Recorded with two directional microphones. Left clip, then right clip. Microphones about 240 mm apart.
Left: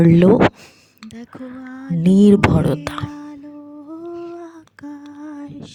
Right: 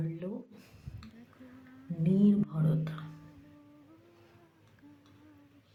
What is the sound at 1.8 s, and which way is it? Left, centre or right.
Music, left.